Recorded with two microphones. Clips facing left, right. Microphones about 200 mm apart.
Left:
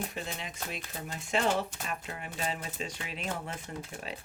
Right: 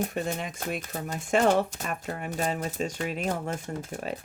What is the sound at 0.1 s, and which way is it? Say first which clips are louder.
Speech: right 8 dB; 50° right (ahead or behind).